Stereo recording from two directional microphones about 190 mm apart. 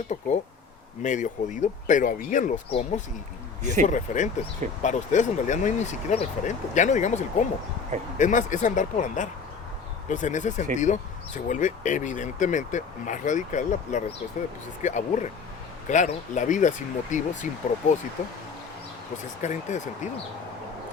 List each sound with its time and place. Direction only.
0.1 s speech: 40° left (ahead or behind)
2.6 s speech: 30° left (ahead or behind)
19.4 s speech: 40° left (ahead or behind)